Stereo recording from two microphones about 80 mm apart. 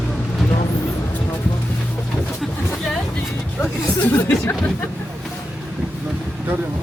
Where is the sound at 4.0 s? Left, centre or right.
Left.